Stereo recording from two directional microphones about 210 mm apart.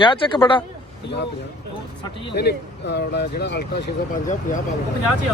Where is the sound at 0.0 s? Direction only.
20° left (ahead or behind).